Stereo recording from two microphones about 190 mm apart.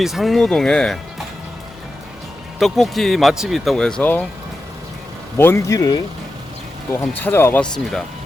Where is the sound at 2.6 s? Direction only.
Centre (ahead or behind).